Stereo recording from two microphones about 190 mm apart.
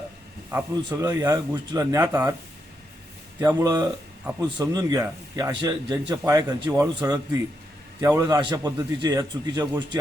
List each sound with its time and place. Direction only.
0.5 s speech: 20° right (ahead or behind)
3.4 s a man's voice: 15° right (ahead or behind)